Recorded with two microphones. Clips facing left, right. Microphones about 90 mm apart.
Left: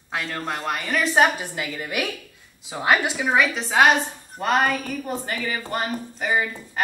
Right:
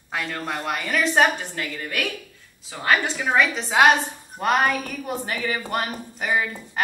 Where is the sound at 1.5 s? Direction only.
15° left (ahead or behind).